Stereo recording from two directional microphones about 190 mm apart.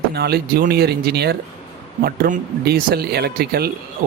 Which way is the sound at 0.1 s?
55° right (ahead or behind).